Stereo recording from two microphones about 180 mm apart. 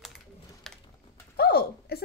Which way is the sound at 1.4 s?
60° left (ahead or behind).